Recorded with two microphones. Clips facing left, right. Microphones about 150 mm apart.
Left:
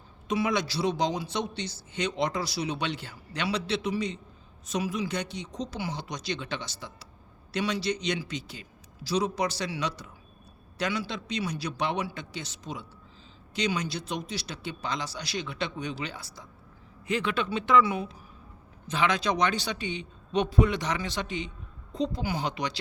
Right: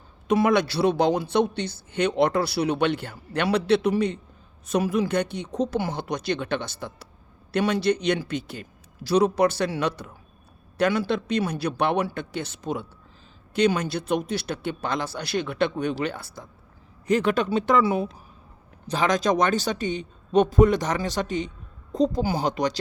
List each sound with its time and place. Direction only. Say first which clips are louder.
0.3 s speech: right 7 dB; 60° right (ahead or behind)
17.1 s a man's voice: right 7 dB; 40° right (ahead or behind)